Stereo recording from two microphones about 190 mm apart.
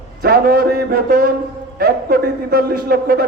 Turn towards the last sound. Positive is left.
turn(degrees=-50)  # may be behind; listen again after turning